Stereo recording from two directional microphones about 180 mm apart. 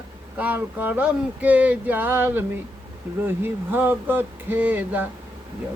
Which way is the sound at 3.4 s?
10° right (ahead or behind).